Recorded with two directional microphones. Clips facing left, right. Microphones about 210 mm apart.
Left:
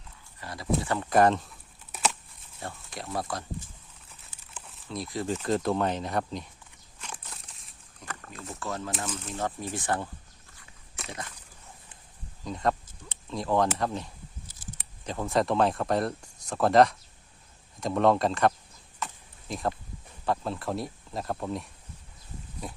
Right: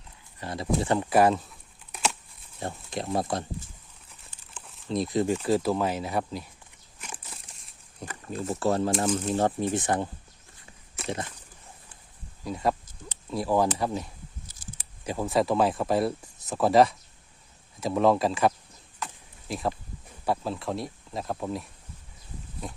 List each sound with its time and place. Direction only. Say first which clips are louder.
0.3 s speech: right 2 dB; 25° right (ahead or behind)
1.1 s speech: even; 5° right (ahead or behind)
1.9 s a sound: even; centre (ahead or behind)
2.6 s speech: right 6 dB; 20° right (ahead or behind)
4.3 s crumpling: even; 5° left (ahead or behind)
4.9 s speech: right 6 dB; 20° right (ahead or behind)
5.4 s speech: right 2 dB; 5° right (ahead or behind)
7.0 s a sound: even; 5° right (ahead or behind)
8.0 s speech: right 9 dB; 30° right (ahead or behind)
9.6 s speech: right 5 dB; 20° right (ahead or behind)
11.0 s a sound: right 9 dB; centre (ahead or behind)
12.5 s speech: right 1 dB; 10° right (ahead or behind)
18.9 s a sound: left 1 dB; centre (ahead or behind)
20.2 s speech: right 1 dB; 5° right (ahead or behind)